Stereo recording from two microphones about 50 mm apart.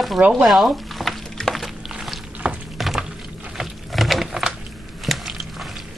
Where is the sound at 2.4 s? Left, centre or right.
Right.